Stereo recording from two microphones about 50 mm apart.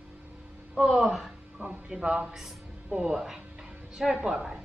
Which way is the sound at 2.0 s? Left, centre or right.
Right.